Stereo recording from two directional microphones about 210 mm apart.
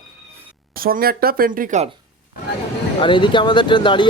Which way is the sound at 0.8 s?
45° right (ahead or behind).